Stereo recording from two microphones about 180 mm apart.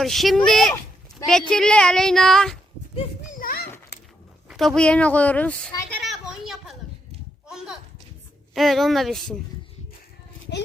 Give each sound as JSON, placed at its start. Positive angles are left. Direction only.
{"t": 0.0, "sound": "speech", "side_deg": 0}
{"t": 2.9, "sound": "children playing", "side_deg": 45}
{"t": 3.9, "sound": "keys jangling", "side_deg": 65}
{"t": 4.4, "sound": "speech", "side_deg": 0}
{"t": 5.9, "sound": "a sound", "side_deg": 0}
{"t": 8.5, "sound": "speech", "side_deg": 0}